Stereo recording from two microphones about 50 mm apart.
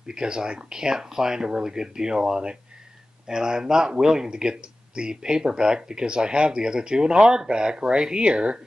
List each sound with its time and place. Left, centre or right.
0.0 s speech: centre